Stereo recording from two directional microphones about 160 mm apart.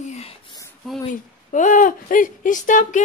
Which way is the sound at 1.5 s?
55° left (ahead or behind).